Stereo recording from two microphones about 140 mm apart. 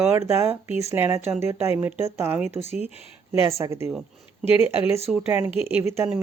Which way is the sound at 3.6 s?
20° right (ahead or behind).